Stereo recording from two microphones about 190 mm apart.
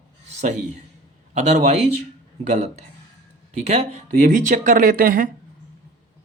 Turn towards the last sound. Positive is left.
turn(degrees=-50)  # may be behind; listen again after turning